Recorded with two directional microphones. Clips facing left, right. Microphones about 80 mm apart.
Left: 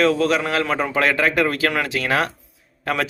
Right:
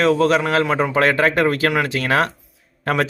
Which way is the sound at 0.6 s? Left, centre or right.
Centre.